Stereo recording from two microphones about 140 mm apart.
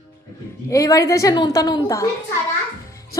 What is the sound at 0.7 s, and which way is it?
A woman's voice, 25° left (ahead or behind).